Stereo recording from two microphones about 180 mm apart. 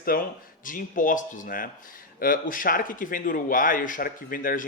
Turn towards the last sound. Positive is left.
turn(degrees=50)  # may be behind; listen again after turning